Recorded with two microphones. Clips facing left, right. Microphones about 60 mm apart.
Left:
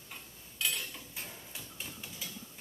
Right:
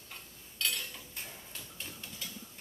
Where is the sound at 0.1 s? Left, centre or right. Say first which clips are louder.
Left 1 dB; centre.